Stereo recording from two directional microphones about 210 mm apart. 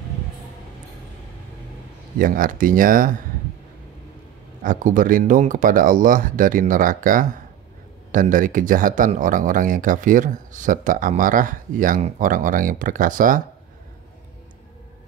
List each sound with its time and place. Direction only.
2.1 s speech: 40° right (ahead or behind)
4.6 s speech: 40° right (ahead or behind)